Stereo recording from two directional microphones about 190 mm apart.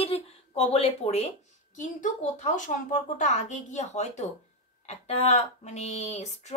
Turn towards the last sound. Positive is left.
turn(degrees=35)  # may be behind; listen again after turning